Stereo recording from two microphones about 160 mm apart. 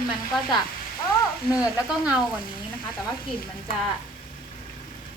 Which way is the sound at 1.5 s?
5° right (ahead or behind).